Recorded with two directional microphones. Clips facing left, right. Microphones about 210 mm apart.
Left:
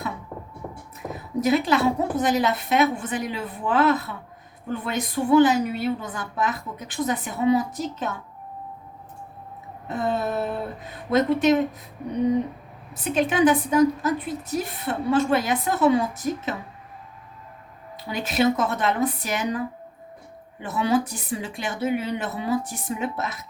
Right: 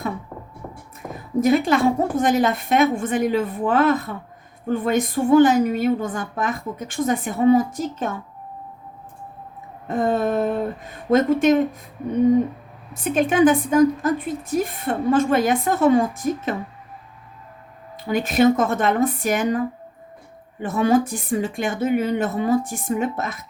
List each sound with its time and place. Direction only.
1.0 s a sound: 5° left (ahead or behind)
1.4 s a woman's voice: 50° right (ahead or behind)
9.9 s a woman's voice: 45° right (ahead or behind)
13.1 s a woman's voice: 50° right (ahead or behind)
18.1 s a woman's voice: 50° right (ahead or behind)